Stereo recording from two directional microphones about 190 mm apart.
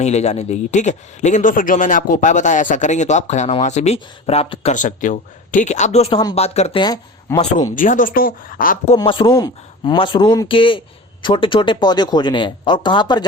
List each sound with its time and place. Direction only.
0.0 s speech: 35° left (ahead or behind)
4.7 s speech: 40° left (ahead or behind)
6.8 s speech: 20° left (ahead or behind)
7.8 s a woman's voice: 45° left (ahead or behind)
9.0 s speech: 25° left (ahead or behind)